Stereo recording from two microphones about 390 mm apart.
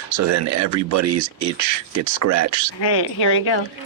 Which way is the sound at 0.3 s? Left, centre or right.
Right.